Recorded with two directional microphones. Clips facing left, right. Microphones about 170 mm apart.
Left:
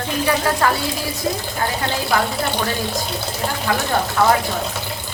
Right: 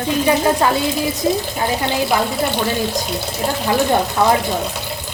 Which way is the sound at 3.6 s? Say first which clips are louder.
Right 5 dB; 20° right (ahead or behind).